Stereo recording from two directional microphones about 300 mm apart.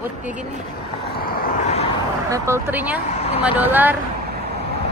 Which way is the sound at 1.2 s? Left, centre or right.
Left.